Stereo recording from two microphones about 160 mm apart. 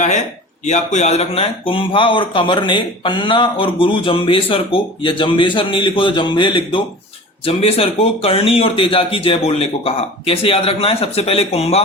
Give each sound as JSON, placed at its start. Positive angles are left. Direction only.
{"t": 0.6, "sound": "speech", "side_deg": 45}